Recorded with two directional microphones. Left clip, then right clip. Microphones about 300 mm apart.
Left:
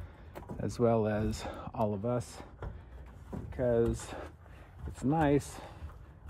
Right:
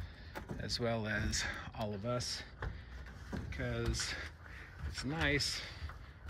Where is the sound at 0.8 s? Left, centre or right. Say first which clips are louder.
Left 9 dB; left.